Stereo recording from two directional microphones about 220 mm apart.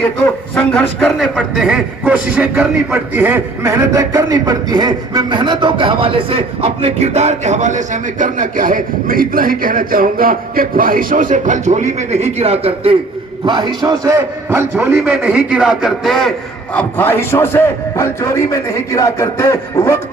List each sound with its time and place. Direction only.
0.5 s a man's voice: 5° left (ahead or behind)